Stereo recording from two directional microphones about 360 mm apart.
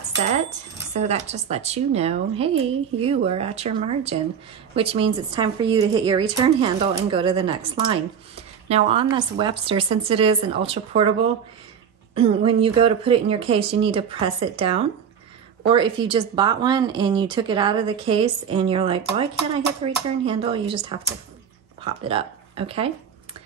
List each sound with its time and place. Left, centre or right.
0.9 s a woman's voice: centre